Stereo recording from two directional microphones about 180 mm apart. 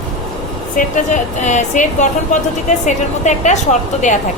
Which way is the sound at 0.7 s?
45° left (ahead or behind).